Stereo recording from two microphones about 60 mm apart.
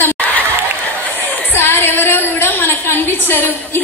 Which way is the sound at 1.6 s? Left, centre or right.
Left.